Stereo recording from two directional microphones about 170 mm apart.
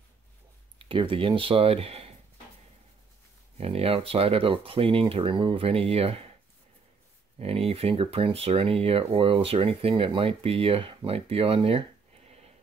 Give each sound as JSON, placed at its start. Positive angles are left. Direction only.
{"t": 0.7, "sound": "speech", "side_deg": -30}
{"t": 3.5, "sound": "speech", "side_deg": -35}
{"t": 7.3, "sound": "speech", "side_deg": -35}